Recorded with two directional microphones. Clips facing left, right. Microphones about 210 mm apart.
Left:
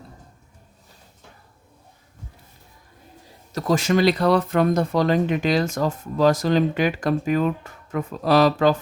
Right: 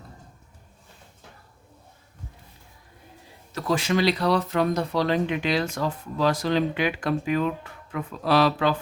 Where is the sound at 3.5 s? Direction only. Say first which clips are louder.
Left 4 dB; 40° left (ahead or behind).